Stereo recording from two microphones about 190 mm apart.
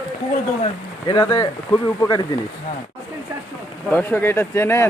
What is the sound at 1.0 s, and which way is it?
Speech, 20° left (ahead or behind).